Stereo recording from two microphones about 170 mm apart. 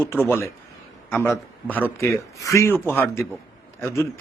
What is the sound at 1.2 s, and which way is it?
A man's voice, 10° left (ahead or behind).